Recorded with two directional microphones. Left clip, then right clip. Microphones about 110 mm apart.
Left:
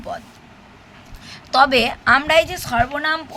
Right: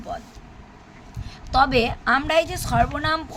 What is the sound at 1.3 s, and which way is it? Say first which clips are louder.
A woman's voice: left 4 dB; 5° left (ahead or behind).